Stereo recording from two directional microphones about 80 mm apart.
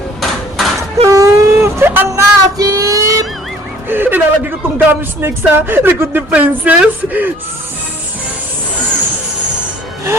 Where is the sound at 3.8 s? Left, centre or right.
Right.